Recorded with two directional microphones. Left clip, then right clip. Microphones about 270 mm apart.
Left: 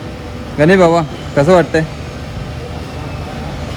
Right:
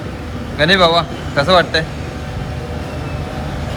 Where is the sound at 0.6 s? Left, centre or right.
Left.